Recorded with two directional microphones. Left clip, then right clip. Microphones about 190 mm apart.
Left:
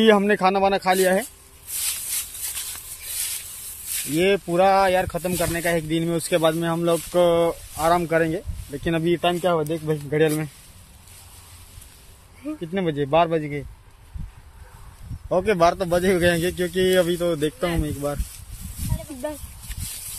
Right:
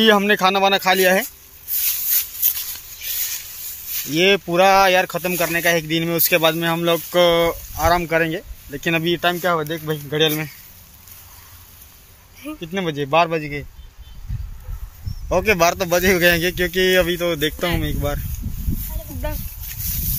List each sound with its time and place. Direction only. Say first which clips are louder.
0.0 s speech: right 2 dB; 5° left (ahead or behind)
1.0 s speech: right 4 dB; 15° right (ahead or behind)
4.1 s speech: right 4 dB; 20° right (ahead or behind); by 10.3 s 5° left (ahead or behind)
12.4 s speech: right 1 dB; 10° left (ahead or behind)
15.2 s speech: right 2 dB; 5° right (ahead or behind)